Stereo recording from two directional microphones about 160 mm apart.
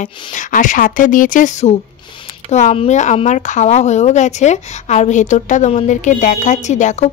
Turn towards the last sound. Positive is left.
turn(degrees=50)  # may be behind; listen again after turning